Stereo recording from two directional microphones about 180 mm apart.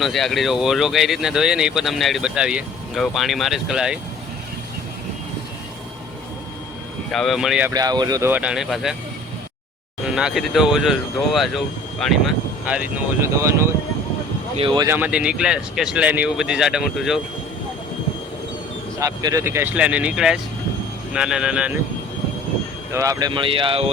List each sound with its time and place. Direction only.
0.0 s speech: centre (ahead or behind)
7.1 s speech: centre (ahead or behind)
7.7 s speech: 20° right (ahead or behind)
8.3 s speech: 5° right (ahead or behind)
10.2 s speech: centre (ahead or behind)
14.5 s speech: 30° right (ahead or behind)
14.8 s speech: 10° right (ahead or behind)
18.9 s speech: 20° right (ahead or behind)
22.9 s speech: 20° right (ahead or behind)